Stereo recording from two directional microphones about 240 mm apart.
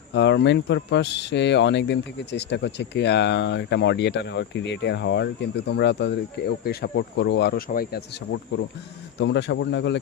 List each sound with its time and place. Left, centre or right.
0.1 s speech: left
9.1 s speech: left